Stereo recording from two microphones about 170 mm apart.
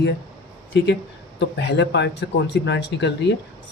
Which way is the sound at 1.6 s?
90° left.